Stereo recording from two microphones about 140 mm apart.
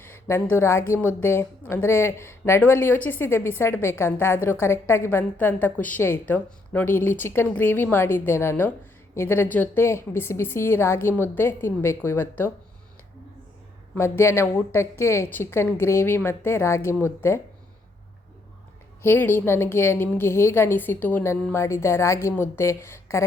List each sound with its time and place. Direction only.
0.0 s a sound: 15° left (ahead or behind)
0.5 s a woman's voice: 20° left (ahead or behind)
13.9 s a woman's voice: 20° left (ahead or behind)
19.0 s a woman's voice: 15° left (ahead or behind)